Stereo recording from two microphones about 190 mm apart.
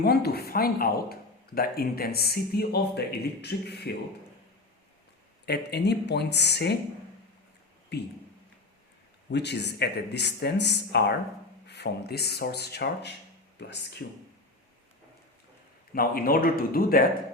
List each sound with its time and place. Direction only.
0.0 s speech: 55° left (ahead or behind)
5.5 s speech: 60° left (ahead or behind)
7.9 s speech: 60° left (ahead or behind)
9.3 s speech: 60° left (ahead or behind)
16.0 s speech: 50° left (ahead or behind)